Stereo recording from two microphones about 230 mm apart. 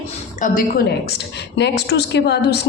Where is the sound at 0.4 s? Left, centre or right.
Left.